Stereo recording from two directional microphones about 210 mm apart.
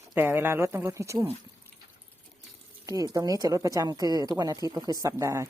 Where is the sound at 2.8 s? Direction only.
15° right (ahead or behind).